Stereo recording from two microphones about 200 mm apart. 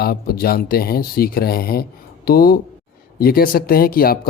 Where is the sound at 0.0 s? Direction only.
50° left (ahead or behind).